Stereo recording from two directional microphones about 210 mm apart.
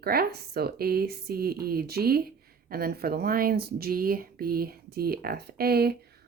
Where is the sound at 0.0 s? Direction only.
45° right (ahead or behind).